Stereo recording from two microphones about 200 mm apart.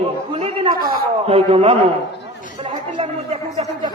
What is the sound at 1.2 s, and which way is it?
A man's voice, 30° right (ahead or behind).